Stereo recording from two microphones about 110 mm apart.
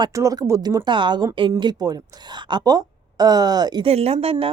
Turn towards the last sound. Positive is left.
turn(degrees=-65)  # may be behind; listen again after turning